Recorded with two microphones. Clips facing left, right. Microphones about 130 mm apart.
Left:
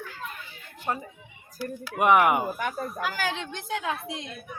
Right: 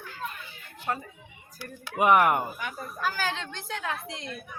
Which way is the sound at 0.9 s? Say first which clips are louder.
Left 1 dB; 20° left (ahead or behind).